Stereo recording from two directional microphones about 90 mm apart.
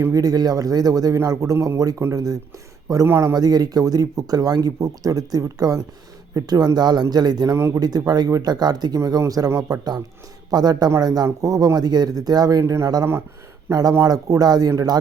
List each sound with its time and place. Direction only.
0.1 s speech: 45° right (ahead or behind)
3.1 s speech: 30° right (ahead or behind)
3.3 s speech: 45° right (ahead or behind)
7.5 s speech: 30° right (ahead or behind)
7.8 s speech: 45° right (ahead or behind)